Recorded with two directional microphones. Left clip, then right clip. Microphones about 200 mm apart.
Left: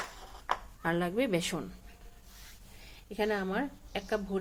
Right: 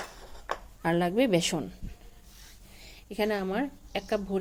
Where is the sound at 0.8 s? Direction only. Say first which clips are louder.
Right 7 dB; 30° right (ahead or behind).